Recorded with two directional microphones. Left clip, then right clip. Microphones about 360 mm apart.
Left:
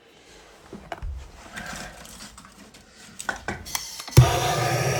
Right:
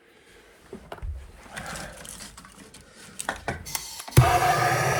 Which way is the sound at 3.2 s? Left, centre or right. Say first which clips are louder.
Left 1 dB; right.